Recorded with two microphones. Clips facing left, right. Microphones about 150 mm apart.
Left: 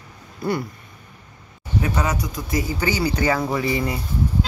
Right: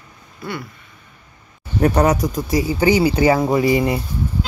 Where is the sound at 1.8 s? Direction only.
60° right (ahead or behind).